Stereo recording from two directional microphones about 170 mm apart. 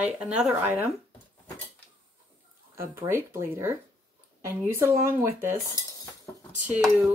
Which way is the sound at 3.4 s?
15° right (ahead or behind).